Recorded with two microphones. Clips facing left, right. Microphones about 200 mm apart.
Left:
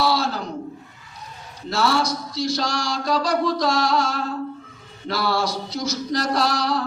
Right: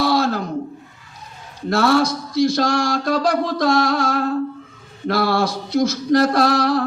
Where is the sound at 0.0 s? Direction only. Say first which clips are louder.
Right 4 dB; 50° right (ahead or behind).